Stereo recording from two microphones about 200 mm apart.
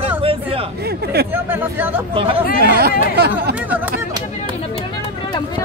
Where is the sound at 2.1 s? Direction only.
25° right (ahead or behind).